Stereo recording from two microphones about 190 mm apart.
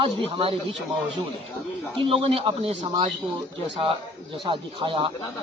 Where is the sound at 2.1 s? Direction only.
30° right (ahead or behind).